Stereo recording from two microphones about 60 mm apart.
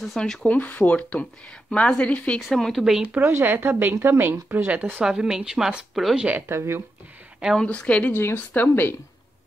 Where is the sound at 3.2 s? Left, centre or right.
Right.